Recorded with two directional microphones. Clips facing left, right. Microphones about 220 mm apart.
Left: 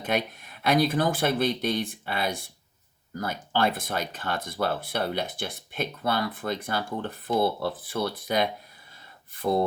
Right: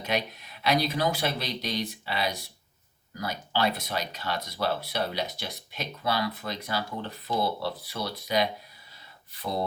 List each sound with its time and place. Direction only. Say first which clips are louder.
0.0 s speech: left 2 dB; 50° left (ahead or behind)